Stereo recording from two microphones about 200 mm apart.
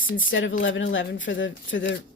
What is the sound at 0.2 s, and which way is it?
Speech, 70° left (ahead or behind).